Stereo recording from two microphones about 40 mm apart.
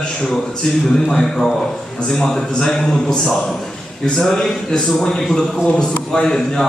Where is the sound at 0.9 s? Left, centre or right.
Centre.